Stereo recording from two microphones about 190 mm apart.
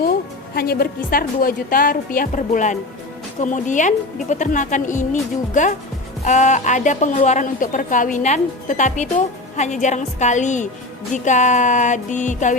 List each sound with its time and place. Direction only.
0.0 s a woman's voice: 55° left (ahead or behind)